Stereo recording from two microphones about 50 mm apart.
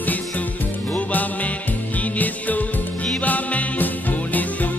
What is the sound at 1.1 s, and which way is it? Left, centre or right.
Music, left.